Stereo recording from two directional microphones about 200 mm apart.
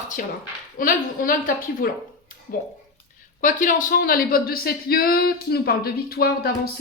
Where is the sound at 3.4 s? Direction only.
40° left (ahead or behind).